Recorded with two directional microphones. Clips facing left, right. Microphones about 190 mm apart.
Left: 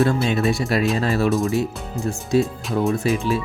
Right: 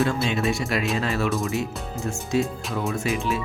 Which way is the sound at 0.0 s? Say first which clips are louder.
Left 4 dB; 40° left (ahead or behind).